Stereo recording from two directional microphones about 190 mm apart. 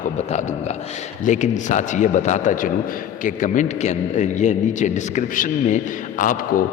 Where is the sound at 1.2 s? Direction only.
40° left (ahead or behind).